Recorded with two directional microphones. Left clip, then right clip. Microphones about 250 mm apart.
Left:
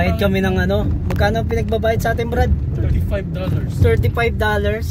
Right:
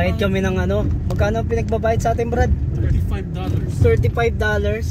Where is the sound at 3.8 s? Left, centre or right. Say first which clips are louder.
Even; centre.